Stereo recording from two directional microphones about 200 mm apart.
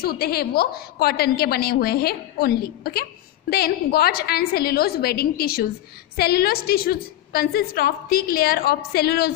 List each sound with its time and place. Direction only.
0.0 s a woman's voice: 50° left (ahead or behind)